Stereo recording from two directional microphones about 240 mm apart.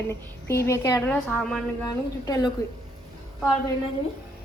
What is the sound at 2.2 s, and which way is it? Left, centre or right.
Speech, centre.